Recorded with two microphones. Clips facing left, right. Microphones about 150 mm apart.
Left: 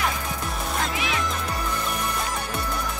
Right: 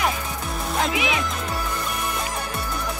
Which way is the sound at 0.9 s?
15° right (ahead or behind).